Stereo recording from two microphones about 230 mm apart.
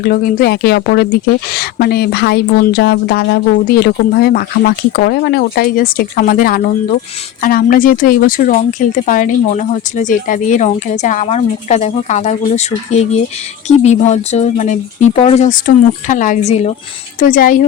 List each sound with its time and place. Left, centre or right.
0.0 s a woman's voice: left